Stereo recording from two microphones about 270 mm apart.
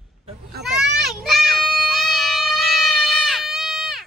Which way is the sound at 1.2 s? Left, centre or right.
Centre.